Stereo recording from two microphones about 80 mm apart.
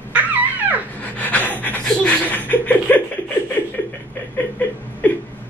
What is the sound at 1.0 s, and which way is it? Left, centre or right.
Pant, left.